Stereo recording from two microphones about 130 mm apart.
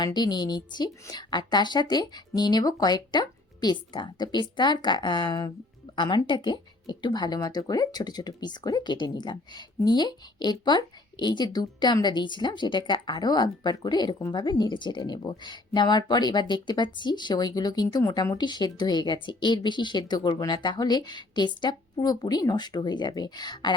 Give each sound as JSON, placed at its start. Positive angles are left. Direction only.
{"t": 0.0, "sound": "a woman's voice", "side_deg": 35}